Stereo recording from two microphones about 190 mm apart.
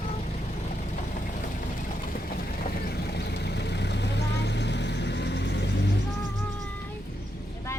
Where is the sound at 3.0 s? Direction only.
60° left (ahead or behind).